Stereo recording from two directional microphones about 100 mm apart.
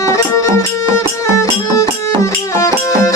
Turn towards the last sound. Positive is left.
turn(degrees=30)  # may be behind; listen again after turning